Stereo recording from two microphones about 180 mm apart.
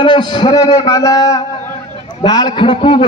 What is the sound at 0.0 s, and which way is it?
A man's voice, 25° left (ahead or behind).